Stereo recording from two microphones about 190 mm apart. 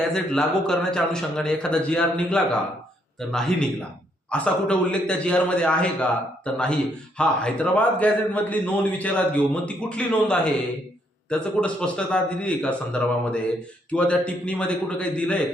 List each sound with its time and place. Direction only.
0.1 s a man's voice: 5° left (ahead or behind)